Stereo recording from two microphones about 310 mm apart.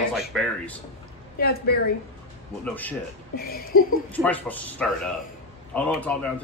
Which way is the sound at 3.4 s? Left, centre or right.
Left.